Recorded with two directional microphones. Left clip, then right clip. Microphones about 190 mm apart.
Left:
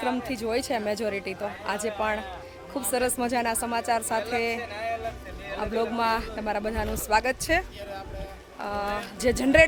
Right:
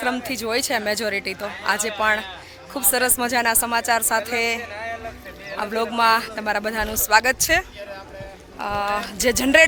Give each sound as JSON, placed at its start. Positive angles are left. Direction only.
{"t": 0.0, "sound": "a man's voice", "side_deg": -5}
{"t": 8.6, "sound": "speech", "side_deg": -5}